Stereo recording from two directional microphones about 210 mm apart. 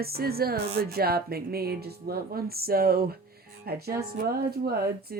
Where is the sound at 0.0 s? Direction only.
45° right (ahead or behind).